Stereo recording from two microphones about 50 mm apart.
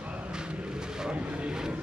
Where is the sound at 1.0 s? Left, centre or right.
Centre.